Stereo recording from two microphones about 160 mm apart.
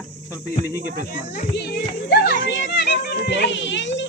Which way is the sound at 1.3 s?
75° left (ahead or behind).